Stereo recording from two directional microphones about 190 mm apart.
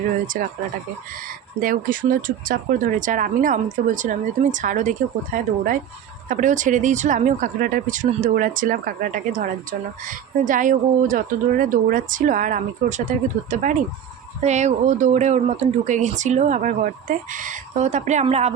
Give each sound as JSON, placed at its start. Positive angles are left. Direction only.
{"t": 0.4, "sound": "speech", "side_deg": -45}
{"t": 1.6, "sound": "speech", "side_deg": -50}